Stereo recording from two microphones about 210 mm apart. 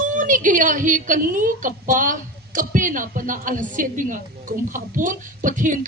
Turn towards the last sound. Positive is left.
turn(degrees=-40)  # may be behind; listen again after turning